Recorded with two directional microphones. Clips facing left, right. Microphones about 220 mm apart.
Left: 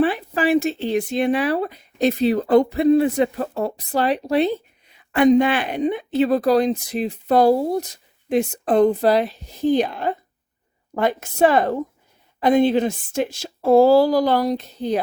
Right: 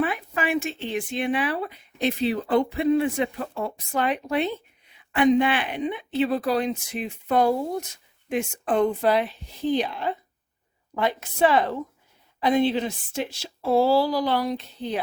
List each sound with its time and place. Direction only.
0.0 s speech: 30° left (ahead or behind)